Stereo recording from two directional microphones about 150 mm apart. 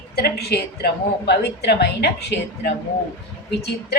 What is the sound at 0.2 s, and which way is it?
A woman's voice, 90° left.